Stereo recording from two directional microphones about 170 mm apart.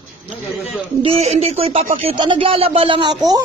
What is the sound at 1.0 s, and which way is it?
Speech, 40° right (ahead or behind).